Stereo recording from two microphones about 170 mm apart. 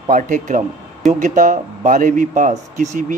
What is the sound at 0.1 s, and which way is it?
Speech, 50° right (ahead or behind).